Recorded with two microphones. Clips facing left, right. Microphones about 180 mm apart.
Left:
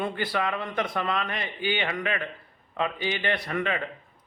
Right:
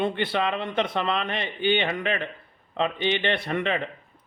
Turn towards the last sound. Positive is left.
turn(degrees=-25)  # may be behind; listen again after turning